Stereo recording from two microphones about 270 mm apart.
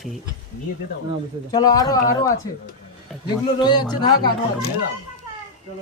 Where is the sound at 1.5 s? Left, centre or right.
Centre.